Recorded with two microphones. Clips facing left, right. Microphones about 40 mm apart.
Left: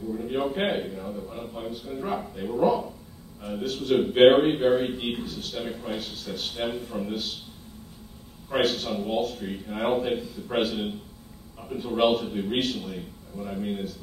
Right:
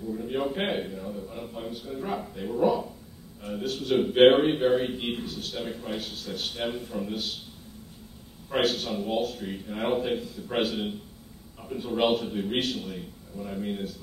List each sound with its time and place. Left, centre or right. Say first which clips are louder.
0.1 s a man's voice: left 1 dB; centre
5.9 s a man's voice: left 1 dB; centre
6.5 s a man's voice: left 2 dB; centre
8.5 s a man's voice: left 1 dB; centre